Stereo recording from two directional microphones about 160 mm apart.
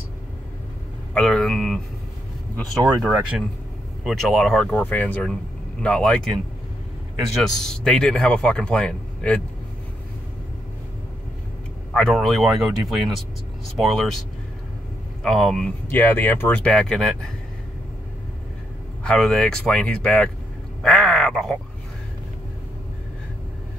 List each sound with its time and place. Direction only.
1.1 s speech: 5° left (ahead or behind)
3.0 s speech: centre (ahead or behind)
7.4 s speech: 5° left (ahead or behind)
11.9 s speech: 5° left (ahead or behind)
15.2 s speech: centre (ahead or behind)
19.0 s speech: 5° left (ahead or behind)
20.8 s crow: 5° left (ahead or behind)